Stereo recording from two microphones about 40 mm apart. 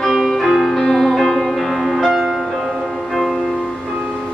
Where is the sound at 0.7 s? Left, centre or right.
Centre.